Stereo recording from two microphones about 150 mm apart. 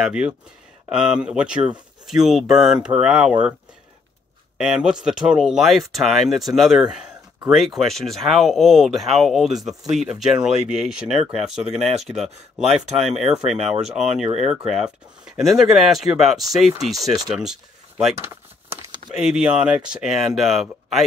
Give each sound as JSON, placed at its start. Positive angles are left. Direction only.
{"t": 0.0, "sound": "speech", "side_deg": -5}
{"t": 4.6, "sound": "speech", "side_deg": -5}
{"t": 18.2, "sound": "crumpling", "side_deg": -15}
{"t": 19.1, "sound": "speech", "side_deg": -5}